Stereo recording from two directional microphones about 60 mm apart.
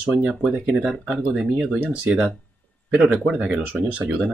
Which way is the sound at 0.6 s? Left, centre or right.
Centre.